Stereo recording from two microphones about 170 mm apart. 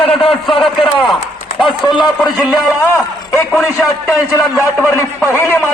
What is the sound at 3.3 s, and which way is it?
A man's voice, 15° left (ahead or behind).